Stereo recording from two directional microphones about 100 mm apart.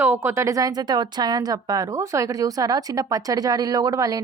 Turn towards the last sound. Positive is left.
turn(degrees=-35)  # may be behind; listen again after turning